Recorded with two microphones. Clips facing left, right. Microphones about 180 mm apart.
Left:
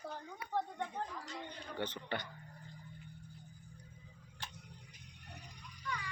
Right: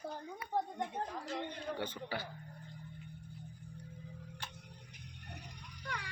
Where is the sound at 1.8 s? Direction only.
5° right (ahead or behind).